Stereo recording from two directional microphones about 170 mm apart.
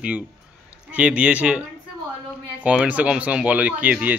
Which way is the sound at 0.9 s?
5° right (ahead or behind).